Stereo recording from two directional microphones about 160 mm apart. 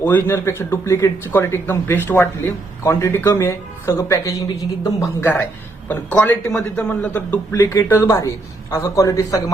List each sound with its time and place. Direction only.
0.0 s a man's voice: 10° left (ahead or behind)